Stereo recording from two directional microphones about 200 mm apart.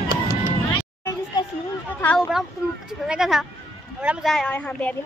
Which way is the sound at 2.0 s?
10° left (ahead or behind).